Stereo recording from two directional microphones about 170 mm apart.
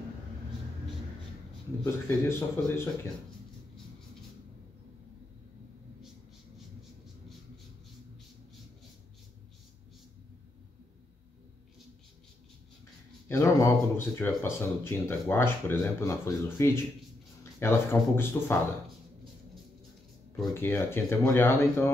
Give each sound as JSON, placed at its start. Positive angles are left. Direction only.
{"t": 2.0, "sound": "speech", "side_deg": 15}
{"t": 13.3, "sound": "speech", "side_deg": 15}
{"t": 20.5, "sound": "speech", "side_deg": 15}